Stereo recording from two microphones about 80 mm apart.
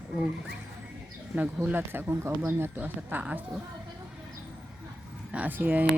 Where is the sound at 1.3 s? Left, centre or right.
Right.